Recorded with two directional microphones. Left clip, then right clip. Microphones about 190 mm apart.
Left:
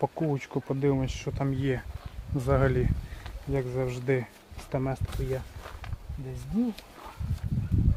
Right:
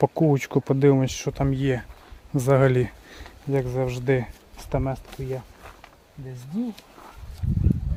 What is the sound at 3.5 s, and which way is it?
Speech, 60° right (ahead or behind).